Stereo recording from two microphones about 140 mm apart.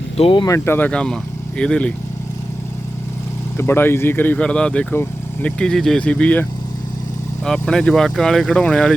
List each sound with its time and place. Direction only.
0.2 s speech: 40° left (ahead or behind)
0.4 s speech: 20° left (ahead or behind)
3.6 s speech: 15° left (ahead or behind)